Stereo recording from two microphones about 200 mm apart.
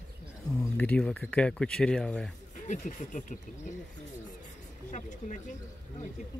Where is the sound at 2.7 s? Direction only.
40° left (ahead or behind).